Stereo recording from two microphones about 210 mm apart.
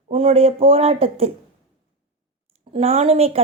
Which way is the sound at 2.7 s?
25° right (ahead or behind).